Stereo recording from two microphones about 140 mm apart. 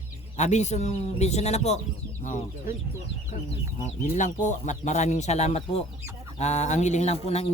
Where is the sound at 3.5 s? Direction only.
50° left (ahead or behind).